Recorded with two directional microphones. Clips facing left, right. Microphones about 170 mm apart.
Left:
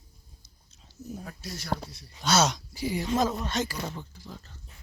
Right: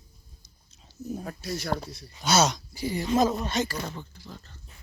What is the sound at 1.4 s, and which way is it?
Speech, 55° right (ahead or behind).